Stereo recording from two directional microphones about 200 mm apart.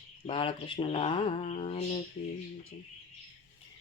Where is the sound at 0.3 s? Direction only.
25° left (ahead or behind).